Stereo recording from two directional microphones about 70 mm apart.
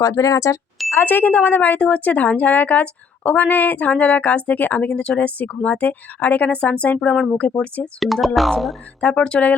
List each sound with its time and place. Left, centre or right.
0.0 s speech: left
1.0 s a woman's voice: left
7.9 s speech: centre
9.0 s a woman's voice: centre